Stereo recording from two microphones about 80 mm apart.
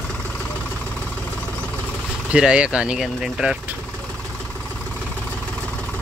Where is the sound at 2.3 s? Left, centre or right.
Centre.